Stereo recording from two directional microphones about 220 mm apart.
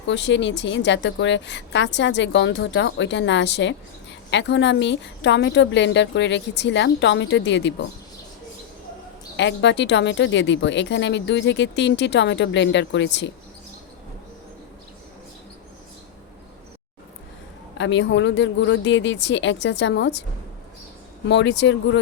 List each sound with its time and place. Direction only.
0.1 s a woman's voice: 55° left (ahead or behind)
9.4 s speech: 55° left (ahead or behind)
17.7 s a woman's voice: 55° left (ahead or behind)
21.2 s speech: 55° left (ahead or behind)